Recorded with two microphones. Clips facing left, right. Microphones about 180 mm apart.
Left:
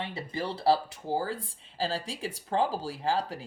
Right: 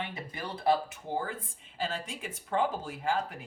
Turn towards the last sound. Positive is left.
turn(degrees=35)  # may be behind; listen again after turning